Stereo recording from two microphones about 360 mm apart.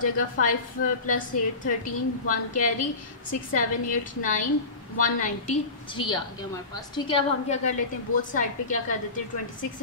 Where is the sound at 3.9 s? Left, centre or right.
Left.